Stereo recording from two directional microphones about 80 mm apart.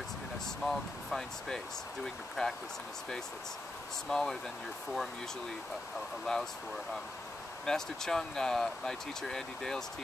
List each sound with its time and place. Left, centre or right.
0.7 s speech: centre
4.1 s speech: centre
6.3 s speech: centre
7.6 s speech: centre